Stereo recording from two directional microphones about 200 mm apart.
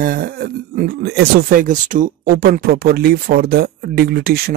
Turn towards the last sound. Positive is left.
turn(degrees=-50)  # may be behind; listen again after turning